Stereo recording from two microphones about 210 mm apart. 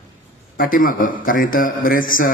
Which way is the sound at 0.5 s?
45° left (ahead or behind).